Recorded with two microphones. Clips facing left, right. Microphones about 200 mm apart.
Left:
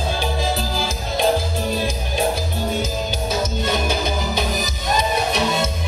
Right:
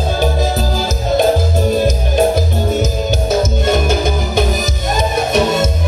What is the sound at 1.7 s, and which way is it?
Music, 50° right (ahead or behind).